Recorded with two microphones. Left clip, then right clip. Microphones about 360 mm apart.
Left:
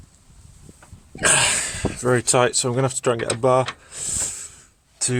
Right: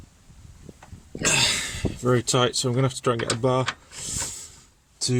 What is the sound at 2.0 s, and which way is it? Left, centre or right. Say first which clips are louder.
Speech: left 4 dB; centre.